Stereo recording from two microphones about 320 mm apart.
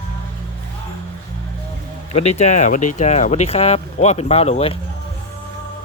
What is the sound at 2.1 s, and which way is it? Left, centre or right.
Speech, centre.